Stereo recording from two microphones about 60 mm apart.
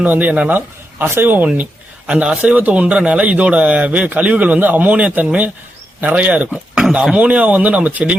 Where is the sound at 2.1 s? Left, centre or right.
Centre.